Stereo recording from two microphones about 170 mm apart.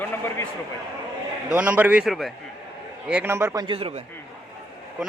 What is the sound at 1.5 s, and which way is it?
Speech, 10° right (ahead or behind).